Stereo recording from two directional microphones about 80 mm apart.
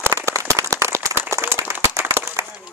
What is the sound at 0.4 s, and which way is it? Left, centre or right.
Clapping, right.